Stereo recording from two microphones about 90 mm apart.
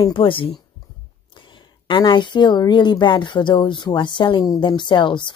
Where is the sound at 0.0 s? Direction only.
70° left (ahead or behind).